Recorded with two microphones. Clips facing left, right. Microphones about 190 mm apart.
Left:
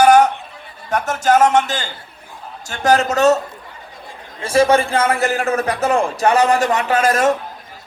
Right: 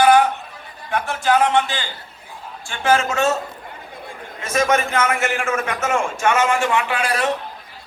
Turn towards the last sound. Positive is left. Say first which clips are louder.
# left 6 dB
turn(degrees=45)  # may be behind; listen again after turning